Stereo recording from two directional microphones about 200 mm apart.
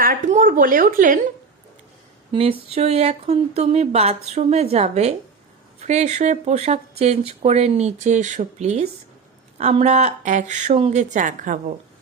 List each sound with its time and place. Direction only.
0.0 s a woman's voice: 40° right (ahead or behind)
2.3 s speech: 30° right (ahead or behind)